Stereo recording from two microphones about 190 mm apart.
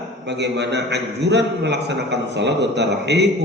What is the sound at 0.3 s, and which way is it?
A man's voice, 65° right (ahead or behind).